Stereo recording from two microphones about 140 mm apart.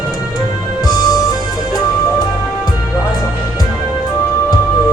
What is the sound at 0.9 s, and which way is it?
Music, 30° left (ahead or behind).